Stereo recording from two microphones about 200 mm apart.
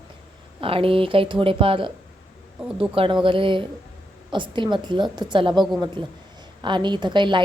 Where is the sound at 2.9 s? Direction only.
25° right (ahead or behind).